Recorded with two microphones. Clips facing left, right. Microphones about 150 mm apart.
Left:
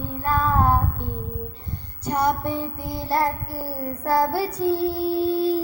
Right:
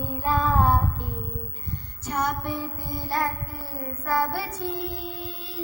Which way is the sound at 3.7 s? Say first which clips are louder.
Left 5 dB; 35° left (ahead or behind).